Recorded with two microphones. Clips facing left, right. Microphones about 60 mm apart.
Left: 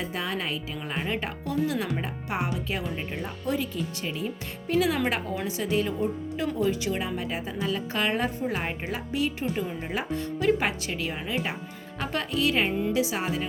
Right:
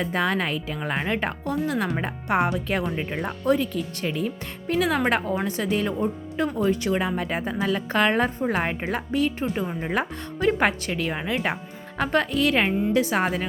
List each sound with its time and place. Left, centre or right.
0.0 s a woman's voice: right